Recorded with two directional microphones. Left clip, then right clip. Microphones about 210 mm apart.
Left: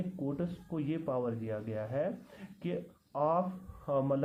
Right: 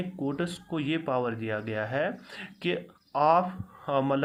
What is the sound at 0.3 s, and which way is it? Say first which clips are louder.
Speech: right 6 dB; 20° right (ahead or behind).